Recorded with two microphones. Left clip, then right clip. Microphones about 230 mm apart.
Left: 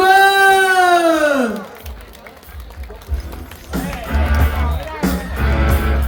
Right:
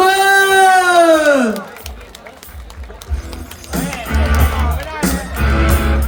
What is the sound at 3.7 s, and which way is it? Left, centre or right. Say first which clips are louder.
Music: right 3 dB; right.